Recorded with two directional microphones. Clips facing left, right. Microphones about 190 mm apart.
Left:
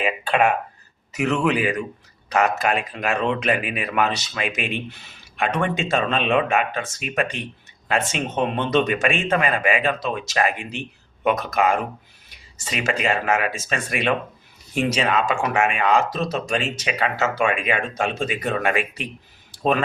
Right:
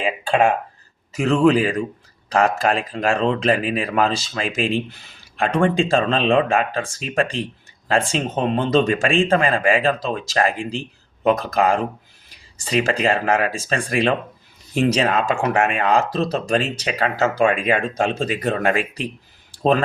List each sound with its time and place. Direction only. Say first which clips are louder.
0.0 s speech: right 2 dB; 30° right (ahead or behind)